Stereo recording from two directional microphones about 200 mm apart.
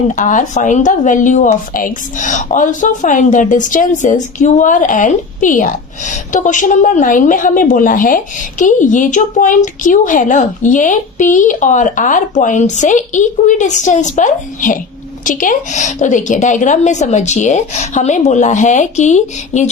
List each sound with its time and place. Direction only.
0.2 s a woman's voice: 40° left (ahead or behind)